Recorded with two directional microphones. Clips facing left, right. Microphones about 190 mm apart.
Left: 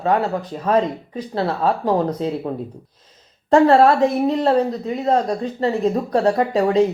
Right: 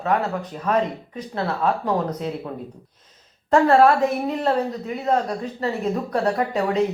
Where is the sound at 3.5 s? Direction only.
35° left (ahead or behind).